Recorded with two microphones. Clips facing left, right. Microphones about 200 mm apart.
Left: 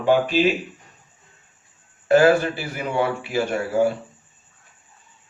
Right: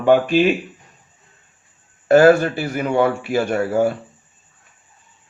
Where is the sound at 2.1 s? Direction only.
45° right (ahead or behind).